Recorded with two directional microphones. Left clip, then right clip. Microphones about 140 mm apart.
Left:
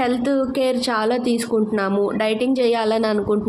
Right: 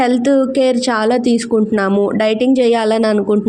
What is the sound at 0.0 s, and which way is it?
A woman's voice, 40° right (ahead or behind).